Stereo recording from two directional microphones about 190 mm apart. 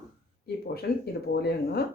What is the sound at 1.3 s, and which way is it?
Speech, 55° left (ahead or behind).